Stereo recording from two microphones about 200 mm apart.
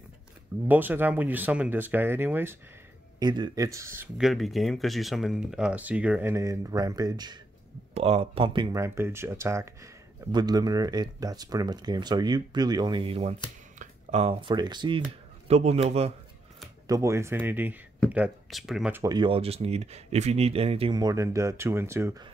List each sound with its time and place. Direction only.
0.7 s speech: 10° right (ahead or behind)
3.2 s speech: 20° right (ahead or behind)
4.2 s speech: centre (ahead or behind); by 7.3 s 20° right (ahead or behind)
7.9 s speech: 30° right (ahead or behind)
15.4 s a man's voice: 30° right (ahead or behind)
16.8 s speech: 15° right (ahead or behind)
19.1 s speech: 25° right (ahead or behind)